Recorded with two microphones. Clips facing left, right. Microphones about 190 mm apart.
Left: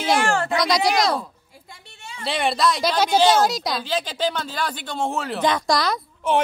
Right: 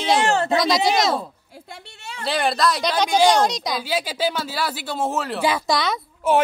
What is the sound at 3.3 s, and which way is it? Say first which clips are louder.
Speech: even; 5° left (ahead or behind).